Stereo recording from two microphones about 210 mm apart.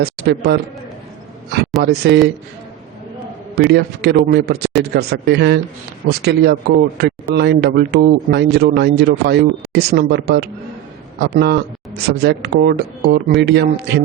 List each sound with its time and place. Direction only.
0.0 s speech: 50° right (ahead or behind)
1.8 s speech: 50° right (ahead or behind)
3.5 s speech: 50° right (ahead or behind)